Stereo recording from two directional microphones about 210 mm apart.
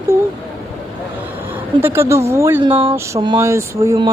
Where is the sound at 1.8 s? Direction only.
10° right (ahead or behind).